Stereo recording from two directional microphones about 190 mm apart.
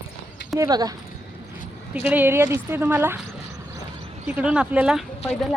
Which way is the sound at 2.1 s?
10° right (ahead or behind).